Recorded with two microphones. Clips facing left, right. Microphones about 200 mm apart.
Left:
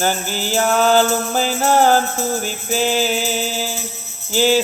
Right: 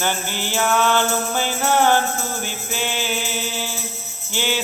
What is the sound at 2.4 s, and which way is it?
Music, 40° left (ahead or behind).